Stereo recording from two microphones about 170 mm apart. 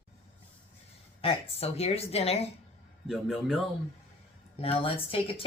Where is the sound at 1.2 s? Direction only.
35° left (ahead or behind).